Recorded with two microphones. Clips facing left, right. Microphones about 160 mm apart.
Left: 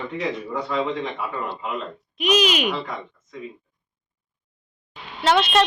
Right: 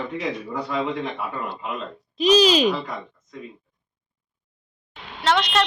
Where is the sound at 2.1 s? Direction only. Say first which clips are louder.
Right 4 dB; 30° right (ahead or behind).